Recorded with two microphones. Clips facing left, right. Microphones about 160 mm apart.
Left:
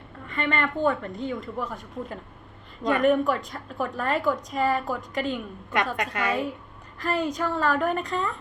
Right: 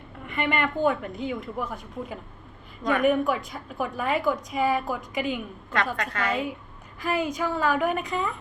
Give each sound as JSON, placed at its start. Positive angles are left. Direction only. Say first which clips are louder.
{"t": 0.3, "sound": "a woman's voice", "louder": "right 1 dB", "side_deg": -10}
{"t": 5.7, "sound": "a woman's voice", "louder": "left 1 dB", "side_deg": 20}
{"t": 7.0, "sound": "a woman's voice", "louder": "even", "side_deg": -5}